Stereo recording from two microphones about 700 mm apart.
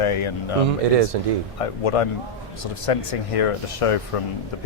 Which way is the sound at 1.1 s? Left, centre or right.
Right.